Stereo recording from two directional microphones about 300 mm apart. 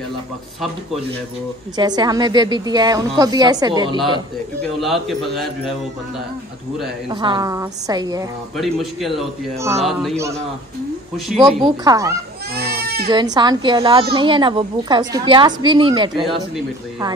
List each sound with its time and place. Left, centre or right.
1.8 s a woman's voice: centre
4.7 s a man's voice: centre
7.1 s a woman's voice: centre
8.5 s a man's voice: centre
11.4 s a woman's voice: centre
12.5 s goat: right
13.1 s a woman's voice: centre